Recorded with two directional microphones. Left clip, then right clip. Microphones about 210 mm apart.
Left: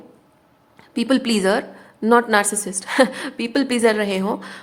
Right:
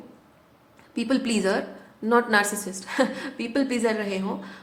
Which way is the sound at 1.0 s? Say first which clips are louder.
Left 6 dB; 35° left (ahead or behind).